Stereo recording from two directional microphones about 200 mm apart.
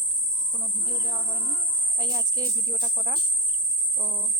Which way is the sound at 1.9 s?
20° right (ahead or behind).